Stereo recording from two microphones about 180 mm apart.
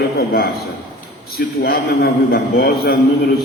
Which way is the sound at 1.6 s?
60° left (ahead or behind).